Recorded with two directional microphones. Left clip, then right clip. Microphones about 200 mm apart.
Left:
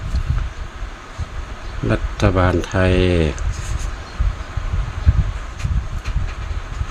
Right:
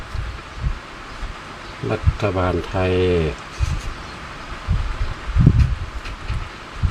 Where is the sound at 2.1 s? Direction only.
50° left (ahead or behind).